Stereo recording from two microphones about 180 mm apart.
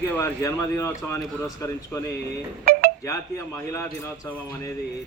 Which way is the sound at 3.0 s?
15° left (ahead or behind).